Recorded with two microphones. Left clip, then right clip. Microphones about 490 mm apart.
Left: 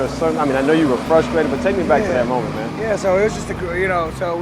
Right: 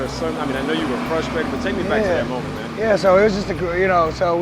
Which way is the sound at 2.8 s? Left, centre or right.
Right.